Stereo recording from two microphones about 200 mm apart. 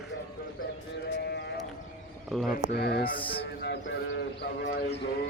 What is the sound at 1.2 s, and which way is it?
Sheep, 55° left (ahead or behind).